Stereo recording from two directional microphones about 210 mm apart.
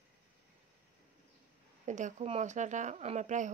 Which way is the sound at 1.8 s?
35° right (ahead or behind).